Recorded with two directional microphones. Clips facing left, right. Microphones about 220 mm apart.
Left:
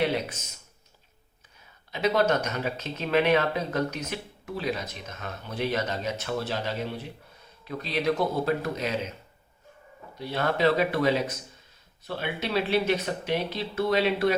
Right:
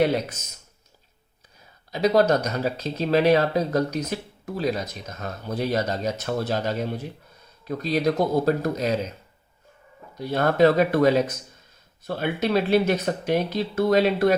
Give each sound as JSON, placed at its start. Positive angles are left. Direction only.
{"t": 1.9, "sound": "speech", "side_deg": -40}
{"t": 10.2, "sound": "speech", "side_deg": -45}